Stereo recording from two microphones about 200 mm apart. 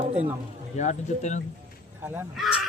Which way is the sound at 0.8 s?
35° left (ahead or behind).